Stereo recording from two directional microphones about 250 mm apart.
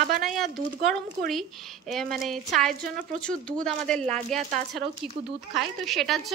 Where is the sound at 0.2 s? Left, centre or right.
Centre.